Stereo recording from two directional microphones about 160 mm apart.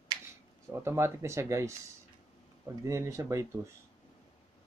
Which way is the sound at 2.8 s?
15° right (ahead or behind).